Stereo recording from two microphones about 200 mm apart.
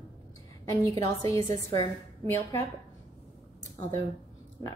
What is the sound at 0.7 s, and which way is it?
A woman's voice, 15° left (ahead or behind).